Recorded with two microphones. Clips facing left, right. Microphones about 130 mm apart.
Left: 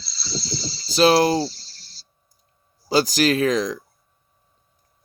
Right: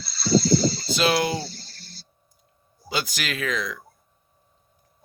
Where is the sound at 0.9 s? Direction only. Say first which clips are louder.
Left 9 dB; 35° left (ahead or behind).